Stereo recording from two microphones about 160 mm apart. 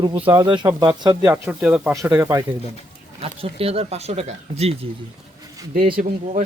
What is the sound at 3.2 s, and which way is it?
Speech, 35° right (ahead or behind).